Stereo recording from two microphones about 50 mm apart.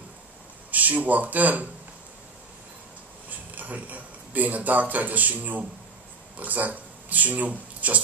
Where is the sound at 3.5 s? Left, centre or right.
Right.